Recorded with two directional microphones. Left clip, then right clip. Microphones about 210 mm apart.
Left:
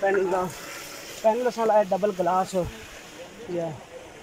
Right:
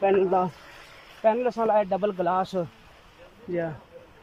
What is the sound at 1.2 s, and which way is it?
Speech, 5° left (ahead or behind).